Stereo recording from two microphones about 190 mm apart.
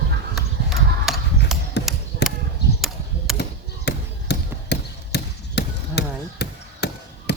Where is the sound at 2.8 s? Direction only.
Centre (ahead or behind).